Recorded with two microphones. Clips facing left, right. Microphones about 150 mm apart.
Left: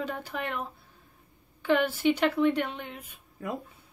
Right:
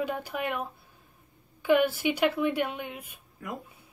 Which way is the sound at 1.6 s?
10° right (ahead or behind).